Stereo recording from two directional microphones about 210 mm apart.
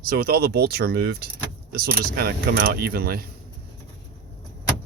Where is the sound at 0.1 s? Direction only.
45° right (ahead or behind).